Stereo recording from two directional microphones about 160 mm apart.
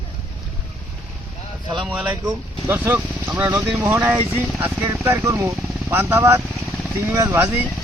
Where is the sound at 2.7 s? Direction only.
10° right (ahead or behind).